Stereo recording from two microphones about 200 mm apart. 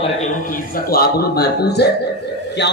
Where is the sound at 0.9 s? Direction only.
50° left (ahead or behind).